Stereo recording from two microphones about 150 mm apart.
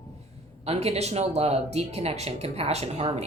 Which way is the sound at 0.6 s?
45° right (ahead or behind).